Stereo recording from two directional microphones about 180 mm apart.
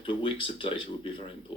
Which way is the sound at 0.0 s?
30° left (ahead or behind).